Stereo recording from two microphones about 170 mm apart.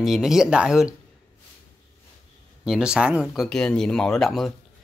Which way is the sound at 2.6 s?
5° right (ahead or behind).